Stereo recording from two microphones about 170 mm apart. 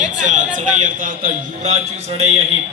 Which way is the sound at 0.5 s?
50° right (ahead or behind).